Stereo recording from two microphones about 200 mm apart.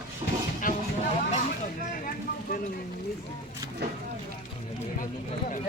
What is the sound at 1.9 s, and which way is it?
Vehicle, 45° left (ahead or behind).